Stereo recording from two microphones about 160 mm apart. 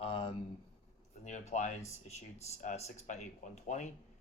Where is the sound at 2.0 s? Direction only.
45° left (ahead or behind).